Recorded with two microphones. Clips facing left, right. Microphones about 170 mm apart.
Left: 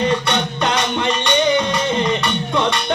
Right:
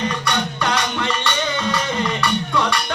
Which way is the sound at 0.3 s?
20° left (ahead or behind).